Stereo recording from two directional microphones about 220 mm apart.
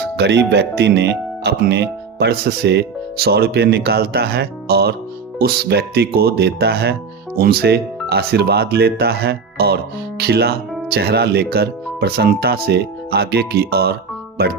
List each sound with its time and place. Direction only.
0.2 s speech: 50° right (ahead or behind)